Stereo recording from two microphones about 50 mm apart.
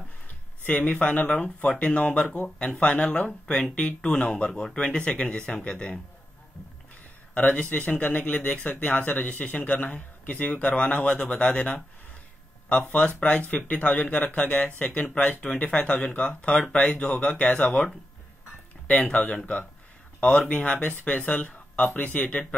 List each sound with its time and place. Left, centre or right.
0.7 s speech: left
7.3 s speech: left
12.8 s speech: left
18.9 s speech: left